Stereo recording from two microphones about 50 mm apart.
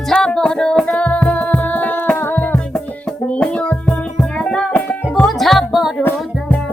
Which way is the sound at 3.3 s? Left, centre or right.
Left.